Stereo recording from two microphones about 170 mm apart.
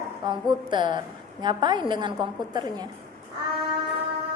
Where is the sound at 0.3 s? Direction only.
25° right (ahead or behind).